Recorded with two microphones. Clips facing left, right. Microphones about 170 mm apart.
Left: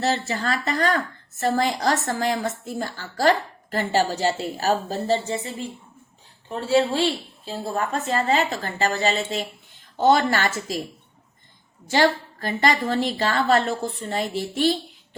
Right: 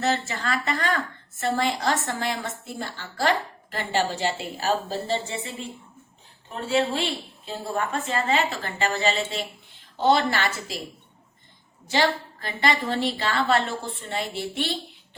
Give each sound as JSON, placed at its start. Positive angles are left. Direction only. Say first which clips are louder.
{"t": 0.0, "sound": "a woman's voice", "louder": "left 2 dB", "side_deg": 35}
{"t": 6.7, "sound": "a woman's voice", "louder": "left 4 dB", "side_deg": 30}
{"t": 11.9, "sound": "a woman's voice", "louder": "left 4 dB", "side_deg": 45}